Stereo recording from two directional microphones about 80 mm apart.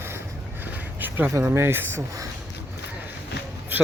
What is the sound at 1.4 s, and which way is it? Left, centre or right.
Speech, right.